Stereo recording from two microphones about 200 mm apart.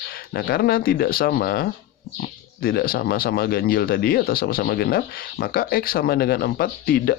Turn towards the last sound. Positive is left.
turn(degrees=50)  # may be behind; listen again after turning